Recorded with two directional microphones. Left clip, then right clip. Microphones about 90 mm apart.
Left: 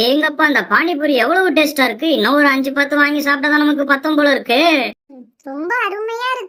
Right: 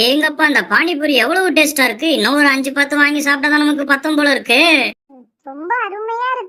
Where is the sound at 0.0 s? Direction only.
5° right (ahead or behind).